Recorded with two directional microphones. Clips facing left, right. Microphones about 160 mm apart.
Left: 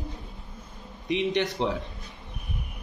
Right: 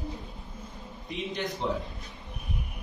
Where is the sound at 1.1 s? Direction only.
75° left (ahead or behind).